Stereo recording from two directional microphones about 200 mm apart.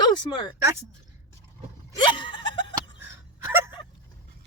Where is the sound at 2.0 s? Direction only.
25° left (ahead or behind).